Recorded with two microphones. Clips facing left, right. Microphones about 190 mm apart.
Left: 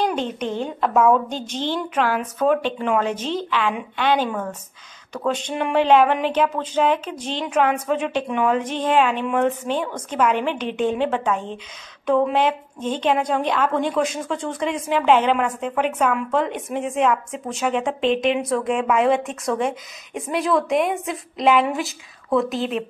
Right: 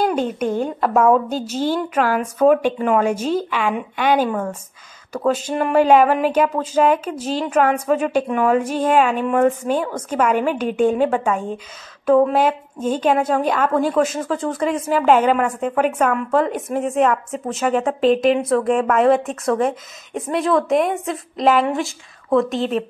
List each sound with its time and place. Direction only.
0.0 s a woman's voice: 10° right (ahead or behind)